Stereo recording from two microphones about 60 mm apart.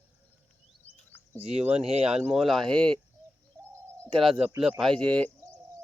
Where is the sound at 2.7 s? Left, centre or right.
Centre.